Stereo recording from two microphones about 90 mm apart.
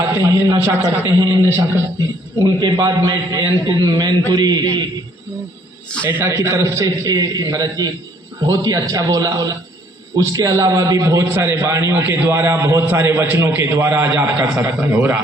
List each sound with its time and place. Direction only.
0.0 s a man's voice: 35° right (ahead or behind)
0.8 s a man's voice: 50° right (ahead or behind)
1.4 s a man's voice: 35° right (ahead or behind)
2.4 s a man's voice: 50° right (ahead or behind)
3.1 s a man's voice: 40° right (ahead or behind)
6.2 s a man's voice: 35° right (ahead or behind)